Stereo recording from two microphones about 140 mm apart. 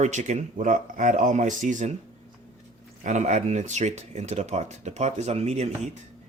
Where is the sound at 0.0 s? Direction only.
55° right (ahead or behind).